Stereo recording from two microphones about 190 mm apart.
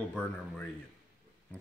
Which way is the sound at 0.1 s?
10° left (ahead or behind).